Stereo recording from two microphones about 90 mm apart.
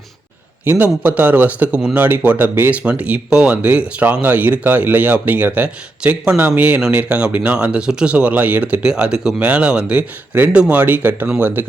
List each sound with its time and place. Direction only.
0.6 s speech: 20° right (ahead or behind)